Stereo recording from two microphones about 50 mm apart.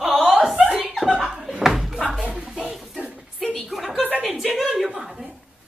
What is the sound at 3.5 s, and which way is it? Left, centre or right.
Speech, centre.